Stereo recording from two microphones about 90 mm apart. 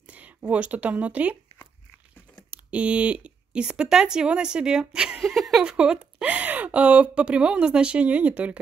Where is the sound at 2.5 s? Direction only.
15° right (ahead or behind).